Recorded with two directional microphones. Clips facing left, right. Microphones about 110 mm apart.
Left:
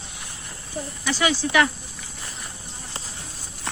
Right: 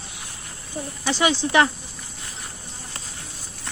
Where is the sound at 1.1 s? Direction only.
20° right (ahead or behind).